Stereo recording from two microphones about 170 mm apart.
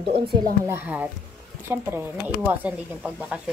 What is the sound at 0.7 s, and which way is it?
A woman's voice, 10° right (ahead or behind).